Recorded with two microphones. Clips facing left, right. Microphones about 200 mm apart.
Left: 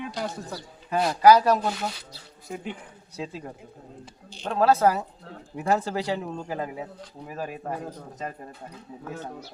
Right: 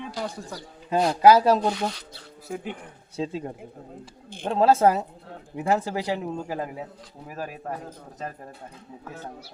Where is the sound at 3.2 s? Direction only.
25° right (ahead or behind); by 7.5 s 5° right (ahead or behind).